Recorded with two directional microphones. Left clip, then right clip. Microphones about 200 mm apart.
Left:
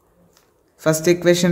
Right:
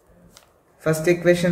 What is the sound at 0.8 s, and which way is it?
Speech, 55° left (ahead or behind).